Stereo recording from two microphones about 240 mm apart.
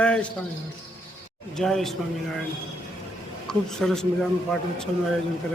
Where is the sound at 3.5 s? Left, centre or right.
Centre.